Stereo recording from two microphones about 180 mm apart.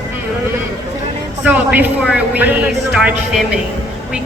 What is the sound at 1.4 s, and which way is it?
A woman's voice, 10° right (ahead or behind).